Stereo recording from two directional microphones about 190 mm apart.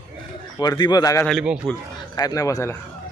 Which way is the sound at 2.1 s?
20° left (ahead or behind).